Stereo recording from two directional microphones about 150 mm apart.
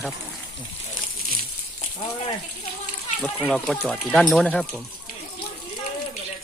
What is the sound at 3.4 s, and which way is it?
Speech, 5° left (ahead or behind).